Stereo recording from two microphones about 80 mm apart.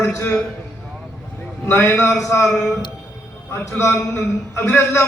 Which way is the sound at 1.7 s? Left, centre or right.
Left.